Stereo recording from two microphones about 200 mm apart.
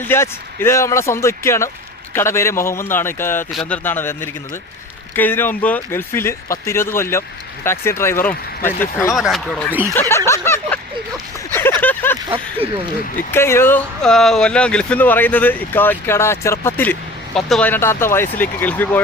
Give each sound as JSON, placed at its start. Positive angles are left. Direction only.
{"t": 0.0, "sound": "speech", "side_deg": 10}
{"t": 9.1, "sound": "speech", "side_deg": 0}
{"t": 11.8, "sound": "vehicle", "side_deg": 10}
{"t": 12.6, "sound": "speech", "side_deg": -30}
{"t": 13.3, "sound": "speech", "side_deg": 10}